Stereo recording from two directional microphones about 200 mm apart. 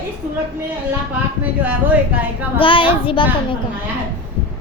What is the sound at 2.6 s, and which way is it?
Speech, 25° left (ahead or behind).